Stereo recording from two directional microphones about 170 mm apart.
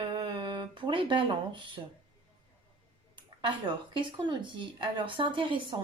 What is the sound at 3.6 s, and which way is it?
A woman's voice, 30° right (ahead or behind).